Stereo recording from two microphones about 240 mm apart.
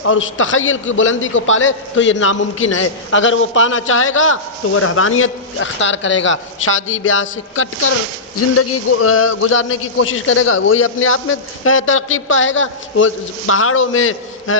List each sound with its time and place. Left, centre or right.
0.0 s a man's voice: left